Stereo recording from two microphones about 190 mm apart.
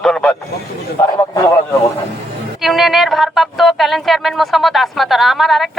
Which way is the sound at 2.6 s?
Centre (ahead or behind).